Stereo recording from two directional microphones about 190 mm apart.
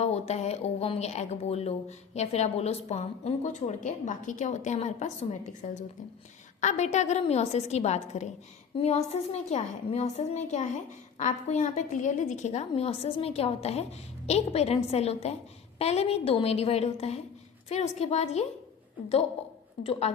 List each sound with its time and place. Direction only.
0.0 s speech: 35° left (ahead or behind)
19.8 s speech: 30° left (ahead or behind)